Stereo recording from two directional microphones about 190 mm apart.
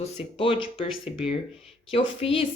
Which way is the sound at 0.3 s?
30° left (ahead or behind).